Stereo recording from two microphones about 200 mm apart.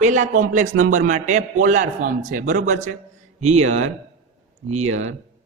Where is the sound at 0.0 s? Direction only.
40° right (ahead or behind).